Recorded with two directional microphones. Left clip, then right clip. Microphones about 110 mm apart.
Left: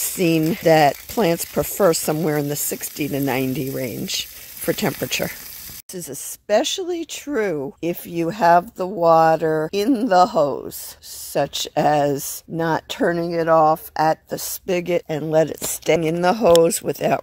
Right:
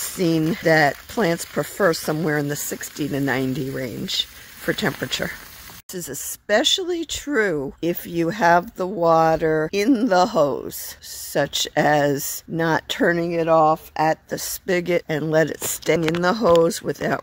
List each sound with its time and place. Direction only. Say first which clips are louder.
0.0 s a sound: left 2 dB; 30° left (ahead or behind)
0.6 s speech: left 3 dB; 35° left (ahead or behind)
2.5 s speech: left 1 dB; 20° left (ahead or behind)
4.0 s speech: right 2 dB; 30° left (ahead or behind)
5.9 s speech: right 1 dB; centre (ahead or behind)
13.2 s speech: left 3 dB; 15° left (ahead or behind); by 16.1 s centre (ahead or behind)
16.1 s speech: left 2 dB; 15° left (ahead or behind)